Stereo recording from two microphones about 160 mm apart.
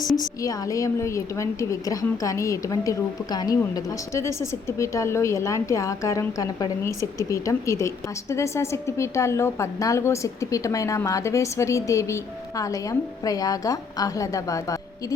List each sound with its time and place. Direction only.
0.0 s a woman's voice: 20° left (ahead or behind)